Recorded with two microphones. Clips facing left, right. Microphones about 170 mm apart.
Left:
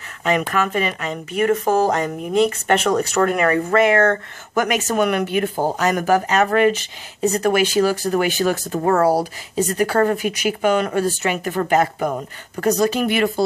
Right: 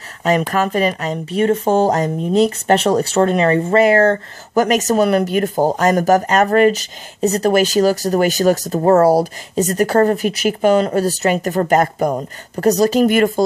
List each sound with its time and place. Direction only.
0.2 s speech: 40° right (ahead or behind)